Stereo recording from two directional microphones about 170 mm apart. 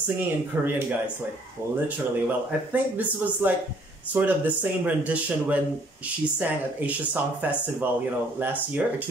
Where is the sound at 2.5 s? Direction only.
10° right (ahead or behind).